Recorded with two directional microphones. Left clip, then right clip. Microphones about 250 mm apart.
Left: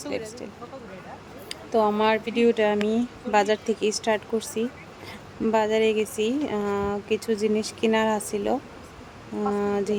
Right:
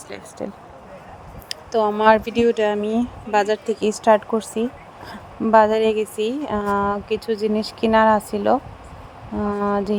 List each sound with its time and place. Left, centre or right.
1.5 s a woman's voice: right
9.6 s a woman's voice: centre